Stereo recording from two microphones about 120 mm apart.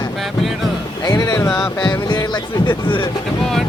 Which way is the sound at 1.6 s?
35° left (ahead or behind).